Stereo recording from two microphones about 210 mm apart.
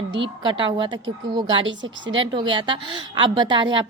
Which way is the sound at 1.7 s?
65° right (ahead or behind).